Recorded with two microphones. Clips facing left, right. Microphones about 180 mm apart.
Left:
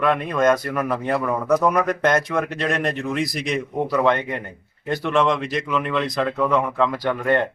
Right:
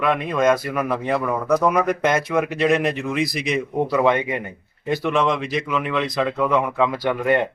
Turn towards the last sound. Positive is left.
turn(degrees=-10)  # may be behind; listen again after turning